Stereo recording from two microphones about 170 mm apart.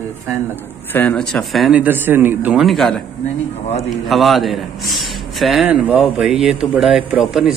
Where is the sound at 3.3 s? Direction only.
40° left (ahead or behind).